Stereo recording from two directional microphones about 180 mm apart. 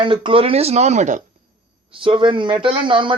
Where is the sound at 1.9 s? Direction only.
30° right (ahead or behind).